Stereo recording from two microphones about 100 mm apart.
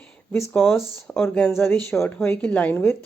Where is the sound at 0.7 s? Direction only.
Centre (ahead or behind).